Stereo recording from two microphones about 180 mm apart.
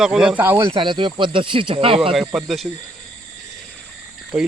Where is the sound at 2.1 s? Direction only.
Centre (ahead or behind).